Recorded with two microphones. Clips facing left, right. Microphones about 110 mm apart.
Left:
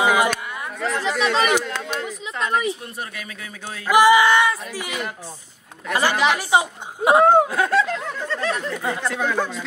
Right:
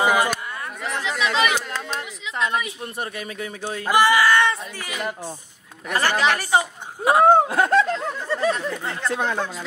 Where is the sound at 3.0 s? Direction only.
30° right (ahead or behind).